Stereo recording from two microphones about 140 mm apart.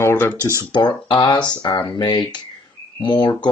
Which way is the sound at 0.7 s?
35° left (ahead or behind).